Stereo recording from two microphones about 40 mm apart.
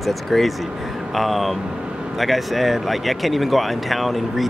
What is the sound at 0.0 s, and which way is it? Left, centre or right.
Speech, centre.